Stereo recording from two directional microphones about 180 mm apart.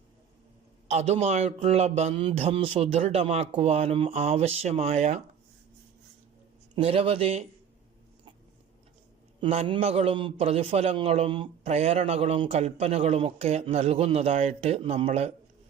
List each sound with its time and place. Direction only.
0.9 s a man's voice: 35° right (ahead or behind)
6.7 s a man's voice: 30° right (ahead or behind)
9.4 s a man's voice: 30° right (ahead or behind)